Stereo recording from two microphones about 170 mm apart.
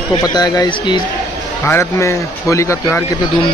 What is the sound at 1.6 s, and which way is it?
Speech, 15° left (ahead or behind).